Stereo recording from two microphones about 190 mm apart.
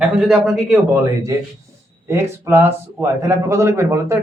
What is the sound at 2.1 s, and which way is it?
Speech, 15° right (ahead or behind).